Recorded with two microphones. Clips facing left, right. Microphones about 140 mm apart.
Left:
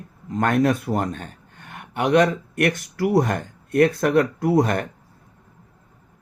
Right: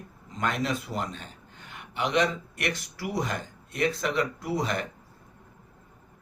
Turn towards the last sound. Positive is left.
turn(degrees=55)  # may be behind; listen again after turning